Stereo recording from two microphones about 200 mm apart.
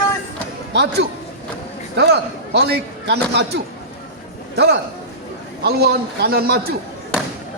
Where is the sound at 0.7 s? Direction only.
60° right (ahead or behind).